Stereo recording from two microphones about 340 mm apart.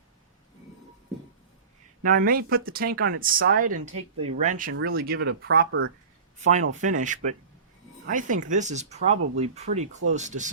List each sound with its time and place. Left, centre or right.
2.0 s speech: right
6.8 s speech: right